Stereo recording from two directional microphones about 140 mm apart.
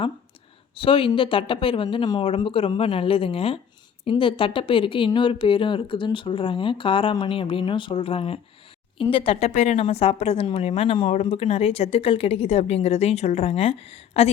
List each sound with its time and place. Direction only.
0.8 s speech: 40° left (ahead or behind)
9.5 s a woman's voice: 60° left (ahead or behind)
9.7 s speech: 45° left (ahead or behind)
11.0 s speech: 55° left (ahead or behind)